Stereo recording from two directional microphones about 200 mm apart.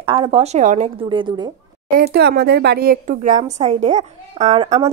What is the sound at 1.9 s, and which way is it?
Speech, 45° right (ahead or behind).